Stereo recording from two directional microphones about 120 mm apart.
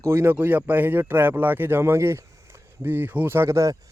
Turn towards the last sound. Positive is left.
turn(degrees=-25)  # may be behind; listen again after turning